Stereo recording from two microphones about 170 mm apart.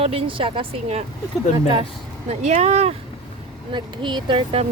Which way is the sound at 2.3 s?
40° right (ahead or behind).